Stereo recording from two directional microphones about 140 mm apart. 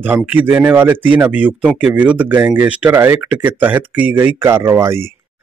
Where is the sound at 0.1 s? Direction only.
10° right (ahead or behind).